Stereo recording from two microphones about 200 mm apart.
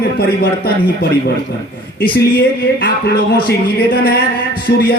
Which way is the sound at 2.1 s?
50° left (ahead or behind).